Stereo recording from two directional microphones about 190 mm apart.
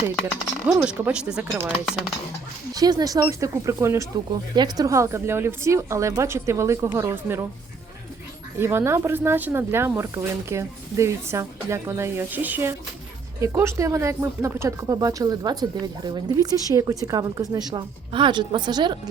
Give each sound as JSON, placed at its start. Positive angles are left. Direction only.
{"t": 0.8, "sound": "speech", "side_deg": -5}
{"t": 2.7, "sound": "speech", "side_deg": -20}
{"t": 8.5, "sound": "speech", "side_deg": -15}